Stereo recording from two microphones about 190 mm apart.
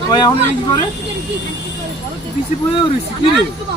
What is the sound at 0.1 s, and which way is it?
Speech, 25° left (ahead or behind).